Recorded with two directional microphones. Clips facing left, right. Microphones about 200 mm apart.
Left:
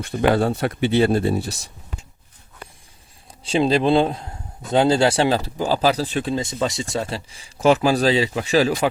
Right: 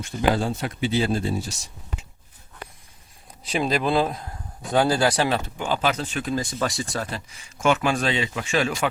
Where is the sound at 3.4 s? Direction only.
30° left (ahead or behind).